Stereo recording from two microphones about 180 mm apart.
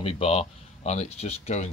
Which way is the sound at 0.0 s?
35° left (ahead or behind).